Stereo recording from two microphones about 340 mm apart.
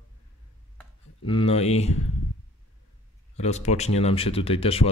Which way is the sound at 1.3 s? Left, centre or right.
Centre.